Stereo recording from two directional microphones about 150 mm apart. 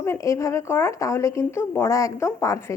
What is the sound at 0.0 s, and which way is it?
A woman's voice, 20° left (ahead or behind).